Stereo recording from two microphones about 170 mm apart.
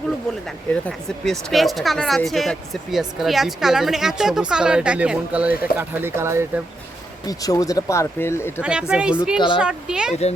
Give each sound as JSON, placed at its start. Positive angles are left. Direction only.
{"t": 0.7, "sound": "speech", "side_deg": 5}
{"t": 7.3, "sound": "speech", "side_deg": 20}
{"t": 8.6, "sound": "speech", "side_deg": -5}